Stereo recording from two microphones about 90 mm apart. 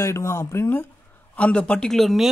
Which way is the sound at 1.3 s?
15° left (ahead or behind).